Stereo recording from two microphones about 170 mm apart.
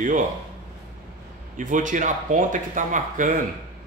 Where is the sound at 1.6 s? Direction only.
50° right (ahead or behind).